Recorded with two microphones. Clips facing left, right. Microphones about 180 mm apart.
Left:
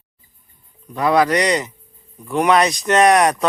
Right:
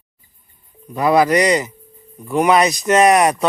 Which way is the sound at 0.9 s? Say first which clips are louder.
Right 2 dB; 5° right (ahead or behind).